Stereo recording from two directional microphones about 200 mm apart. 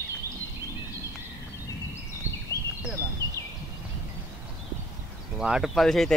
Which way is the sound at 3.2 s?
20° right (ahead or behind).